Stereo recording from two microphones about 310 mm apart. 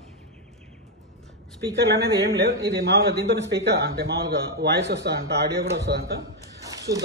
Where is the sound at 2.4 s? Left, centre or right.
Right.